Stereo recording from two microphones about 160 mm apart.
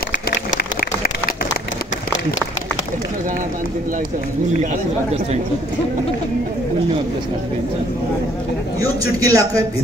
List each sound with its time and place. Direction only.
8.8 s a man's voice: 20° right (ahead or behind)